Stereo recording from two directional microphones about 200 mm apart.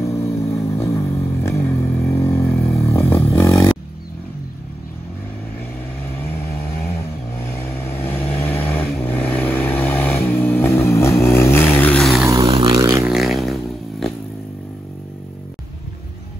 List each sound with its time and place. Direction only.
0.0 s vehicle: 15° left (ahead or behind)
7.5 s vehicle: 10° left (ahead or behind)
12.3 s vehicle: 25° right (ahead or behind)
13.0 s a sound: centre (ahead or behind)